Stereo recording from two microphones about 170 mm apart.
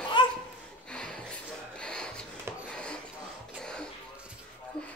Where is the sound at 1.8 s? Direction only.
5° left (ahead or behind).